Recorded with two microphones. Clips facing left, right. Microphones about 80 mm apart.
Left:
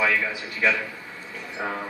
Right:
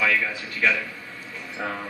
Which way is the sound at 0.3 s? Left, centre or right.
Left.